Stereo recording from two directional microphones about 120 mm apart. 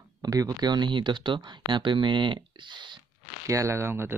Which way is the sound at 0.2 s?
30° right (ahead or behind).